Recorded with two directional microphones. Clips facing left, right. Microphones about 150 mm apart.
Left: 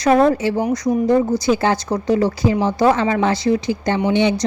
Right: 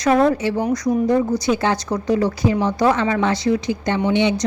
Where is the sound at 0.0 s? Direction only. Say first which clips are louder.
Left 2 dB; 30° left (ahead or behind).